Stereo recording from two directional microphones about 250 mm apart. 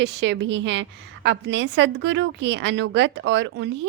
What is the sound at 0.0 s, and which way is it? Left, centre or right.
A woman's voice, right.